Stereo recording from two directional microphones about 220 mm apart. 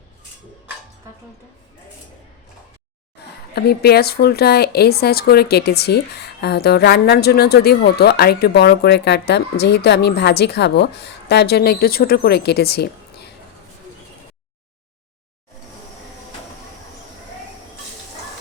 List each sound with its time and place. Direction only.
3.5 s speech: 45° left (ahead or behind)